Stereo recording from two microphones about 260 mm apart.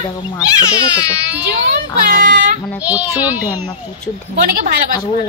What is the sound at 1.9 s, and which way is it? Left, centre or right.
Speech, right.